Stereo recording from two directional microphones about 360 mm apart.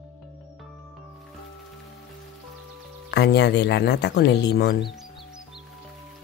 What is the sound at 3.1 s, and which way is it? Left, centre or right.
Speech, left.